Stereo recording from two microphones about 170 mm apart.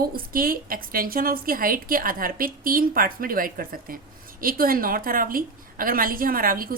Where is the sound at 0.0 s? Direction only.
60° right (ahead or behind).